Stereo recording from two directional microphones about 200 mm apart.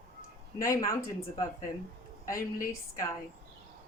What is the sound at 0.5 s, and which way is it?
Speech, 15° left (ahead or behind).